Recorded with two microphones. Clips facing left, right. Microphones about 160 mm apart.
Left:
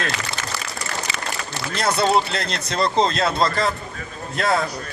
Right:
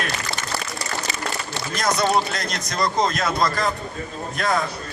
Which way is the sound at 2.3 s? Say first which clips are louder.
Left 2 dB; 30° left (ahead or behind).